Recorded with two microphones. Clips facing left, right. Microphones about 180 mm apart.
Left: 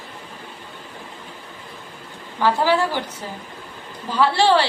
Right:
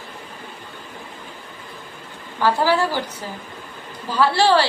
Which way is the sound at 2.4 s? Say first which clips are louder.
Even; 15° left (ahead or behind).